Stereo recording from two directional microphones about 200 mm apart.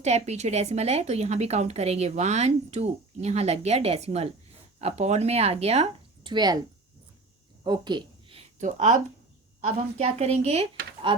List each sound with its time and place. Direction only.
0.0 s a woman's voice: 35° right (ahead or behind)
7.6 s a sound: 20° right (ahead or behind); by 9.0 s 35° right (ahead or behind)
9.6 s a woman's voice: 35° right (ahead or behind)